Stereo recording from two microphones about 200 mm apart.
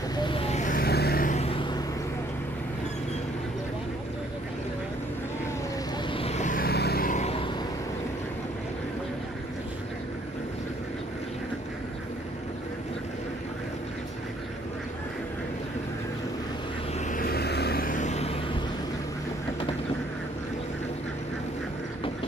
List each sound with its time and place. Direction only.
0.1 s vehicle: 25° left (ahead or behind)
6.1 s vehicle: 30° left (ahead or behind)
17.1 s vehicle: 45° left (ahead or behind); by 18.6 s 30° left (ahead or behind)